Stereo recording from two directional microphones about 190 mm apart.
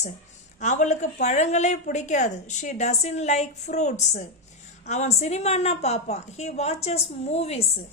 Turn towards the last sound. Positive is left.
turn(degrees=35)  # may be behind; listen again after turning